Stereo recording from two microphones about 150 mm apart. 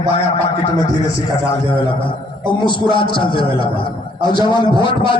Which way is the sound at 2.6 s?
30° left (ahead or behind).